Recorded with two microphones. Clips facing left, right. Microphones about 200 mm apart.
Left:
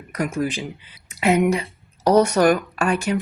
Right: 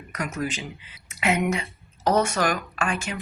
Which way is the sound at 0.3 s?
30° left (ahead or behind).